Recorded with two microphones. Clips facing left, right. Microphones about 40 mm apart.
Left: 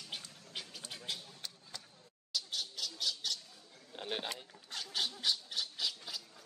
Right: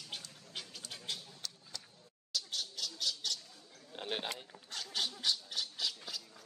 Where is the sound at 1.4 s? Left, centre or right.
Left.